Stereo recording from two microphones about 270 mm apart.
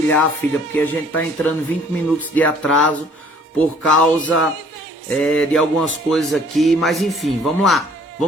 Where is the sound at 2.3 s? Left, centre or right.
Centre.